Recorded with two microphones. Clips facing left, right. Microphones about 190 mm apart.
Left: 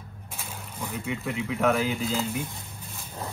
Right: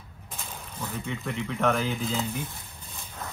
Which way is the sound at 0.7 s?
15° left (ahead or behind).